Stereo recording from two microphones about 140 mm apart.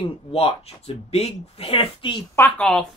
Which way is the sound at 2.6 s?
5° left (ahead or behind).